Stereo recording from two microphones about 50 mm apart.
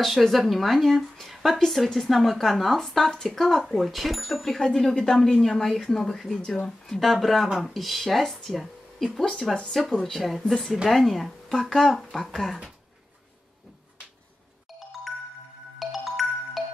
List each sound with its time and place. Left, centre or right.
0.0 s speech: centre
7.0 s speech: centre
9.4 s speech: centre
15.8 s music: centre